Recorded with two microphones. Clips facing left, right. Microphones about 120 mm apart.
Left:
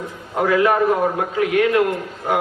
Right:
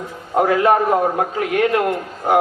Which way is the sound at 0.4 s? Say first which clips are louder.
Even; 35° right (ahead or behind).